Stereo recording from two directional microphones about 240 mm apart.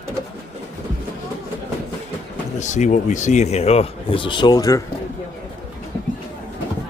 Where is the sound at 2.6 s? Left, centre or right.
Left; by 4.8 s centre.